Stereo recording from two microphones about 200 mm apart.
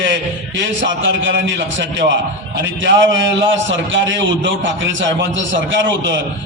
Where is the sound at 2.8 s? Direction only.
70° right (ahead or behind).